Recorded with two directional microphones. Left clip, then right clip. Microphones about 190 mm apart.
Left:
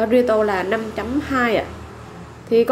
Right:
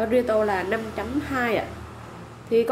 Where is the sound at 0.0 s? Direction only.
15° left (ahead or behind).